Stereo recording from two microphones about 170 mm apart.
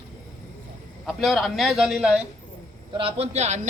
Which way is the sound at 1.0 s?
Centre (ahead or behind).